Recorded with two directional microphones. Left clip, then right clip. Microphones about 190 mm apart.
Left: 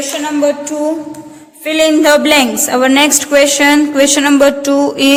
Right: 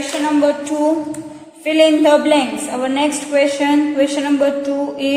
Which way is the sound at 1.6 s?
35° left (ahead or behind).